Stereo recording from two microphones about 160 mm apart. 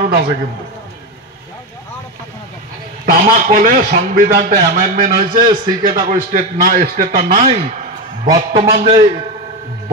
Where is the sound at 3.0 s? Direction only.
55° right (ahead or behind).